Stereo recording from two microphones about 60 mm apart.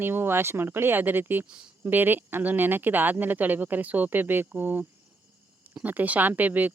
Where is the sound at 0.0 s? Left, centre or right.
Right.